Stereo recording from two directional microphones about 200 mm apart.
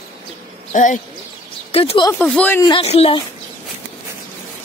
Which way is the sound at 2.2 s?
5° left (ahead or behind).